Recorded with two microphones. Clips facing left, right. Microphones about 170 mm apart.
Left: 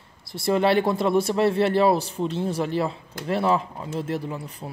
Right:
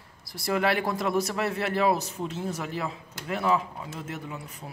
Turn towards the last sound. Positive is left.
turn(degrees=35)  # may be behind; listen again after turning